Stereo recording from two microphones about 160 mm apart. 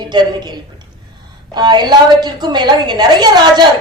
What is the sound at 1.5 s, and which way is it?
A man's voice, 25° right (ahead or behind).